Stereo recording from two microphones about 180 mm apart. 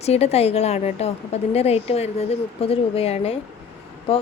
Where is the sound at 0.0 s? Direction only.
35° left (ahead or behind).